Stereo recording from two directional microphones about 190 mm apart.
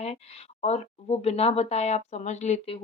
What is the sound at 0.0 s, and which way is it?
Speech, 35° left (ahead or behind).